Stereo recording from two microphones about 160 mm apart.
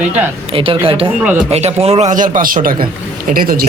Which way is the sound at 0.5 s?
35° right (ahead or behind).